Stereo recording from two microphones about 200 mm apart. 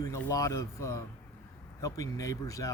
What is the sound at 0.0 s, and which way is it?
Speech, 15° left (ahead or behind).